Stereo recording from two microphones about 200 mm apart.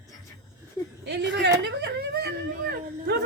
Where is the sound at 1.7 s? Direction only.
55° right (ahead or behind).